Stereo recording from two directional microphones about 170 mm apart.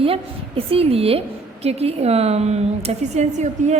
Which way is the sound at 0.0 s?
35° right (ahead or behind).